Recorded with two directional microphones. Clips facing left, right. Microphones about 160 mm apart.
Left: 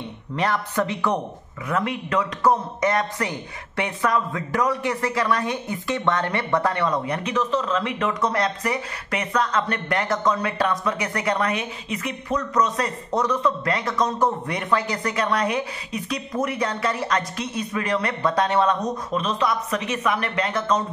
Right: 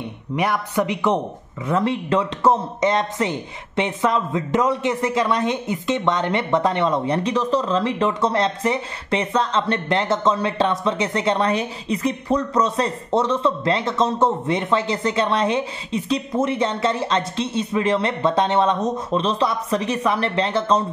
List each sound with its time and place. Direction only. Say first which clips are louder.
0.4 s a woman's voice: right 2 dB; 15° right (ahead or behind)
1.7 s a man's voice: right 4 dB; 30° right (ahead or behind)